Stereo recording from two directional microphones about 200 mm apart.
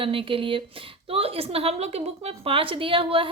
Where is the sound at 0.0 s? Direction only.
25° right (ahead or behind).